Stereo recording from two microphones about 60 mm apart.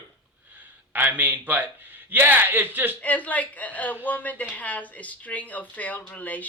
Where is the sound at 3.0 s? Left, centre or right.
Left.